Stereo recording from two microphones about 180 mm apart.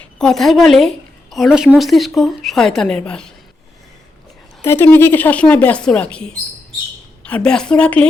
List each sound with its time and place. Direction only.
0.0 s speech: 5° left (ahead or behind)
4.6 s a woman's voice: 15° left (ahead or behind)